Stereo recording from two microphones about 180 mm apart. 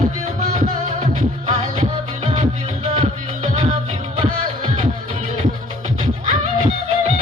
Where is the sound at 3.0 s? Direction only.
40° right (ahead or behind).